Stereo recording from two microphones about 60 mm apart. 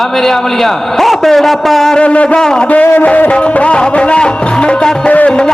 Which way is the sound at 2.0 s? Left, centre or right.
Centre.